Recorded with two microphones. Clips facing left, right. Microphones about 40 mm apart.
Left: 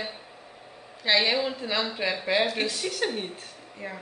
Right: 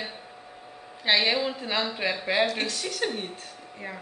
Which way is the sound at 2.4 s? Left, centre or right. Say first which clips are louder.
Even; centre.